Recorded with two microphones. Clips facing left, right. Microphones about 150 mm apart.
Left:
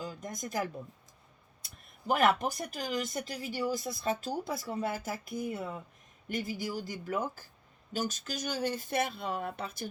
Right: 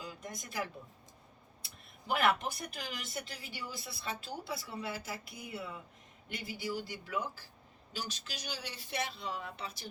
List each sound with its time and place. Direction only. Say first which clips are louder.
0.0 s speech: left 6 dB; 45° left (ahead or behind)